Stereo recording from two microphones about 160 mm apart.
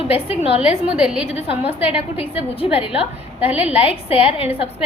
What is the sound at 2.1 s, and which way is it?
Speech, 35° left (ahead or behind).